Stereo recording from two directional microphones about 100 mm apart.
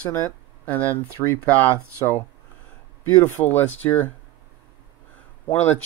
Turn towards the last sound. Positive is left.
turn(degrees=20)  # may be behind; listen again after turning